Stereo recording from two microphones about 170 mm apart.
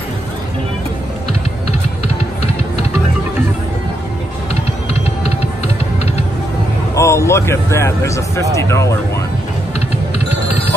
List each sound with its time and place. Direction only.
7.0 s speech: 15° left (ahead or behind)